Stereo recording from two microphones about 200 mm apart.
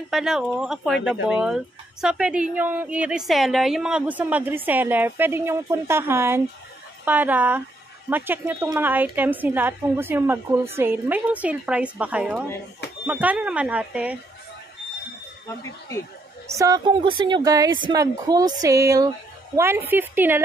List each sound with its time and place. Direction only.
0.1 s speech: centre (ahead or behind)
16.4 s speech: 15° right (ahead or behind)